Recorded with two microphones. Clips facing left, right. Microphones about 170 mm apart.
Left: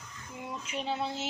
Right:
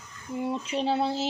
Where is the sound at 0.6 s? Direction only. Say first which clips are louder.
Right 5 dB; 35° right (ahead or behind).